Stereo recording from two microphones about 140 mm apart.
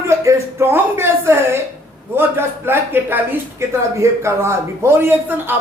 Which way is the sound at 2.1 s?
15° right (ahead or behind).